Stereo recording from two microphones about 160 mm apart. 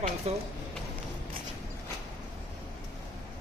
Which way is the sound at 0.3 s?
40° right (ahead or behind).